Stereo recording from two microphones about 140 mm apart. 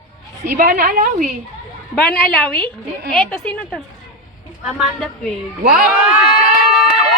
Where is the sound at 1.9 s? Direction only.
10° left (ahead or behind).